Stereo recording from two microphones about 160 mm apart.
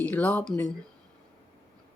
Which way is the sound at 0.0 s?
10° left (ahead or behind).